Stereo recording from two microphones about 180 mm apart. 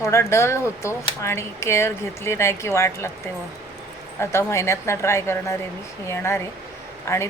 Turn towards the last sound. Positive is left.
turn(degrees=15)  # may be behind; listen again after turning